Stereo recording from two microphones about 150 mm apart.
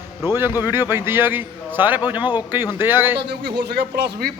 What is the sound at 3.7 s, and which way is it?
Speech, 90° right.